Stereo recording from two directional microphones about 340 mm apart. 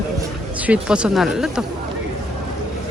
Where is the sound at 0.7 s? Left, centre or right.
Centre.